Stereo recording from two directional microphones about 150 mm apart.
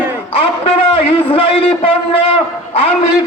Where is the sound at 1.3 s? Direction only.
40° left (ahead or behind).